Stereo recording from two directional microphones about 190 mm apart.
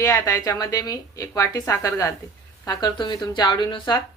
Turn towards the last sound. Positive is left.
turn(degrees=25)  # may be behind; listen again after turning